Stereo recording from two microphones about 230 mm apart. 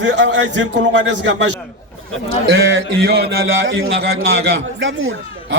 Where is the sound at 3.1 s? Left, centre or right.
Right.